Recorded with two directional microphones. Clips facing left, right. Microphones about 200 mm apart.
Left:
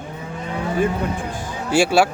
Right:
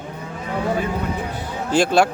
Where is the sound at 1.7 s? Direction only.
10° left (ahead or behind).